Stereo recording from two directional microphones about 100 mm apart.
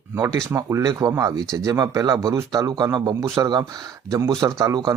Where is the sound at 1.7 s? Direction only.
35° right (ahead or behind).